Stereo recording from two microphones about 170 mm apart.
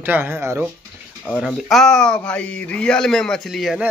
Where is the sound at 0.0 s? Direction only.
10° right (ahead or behind).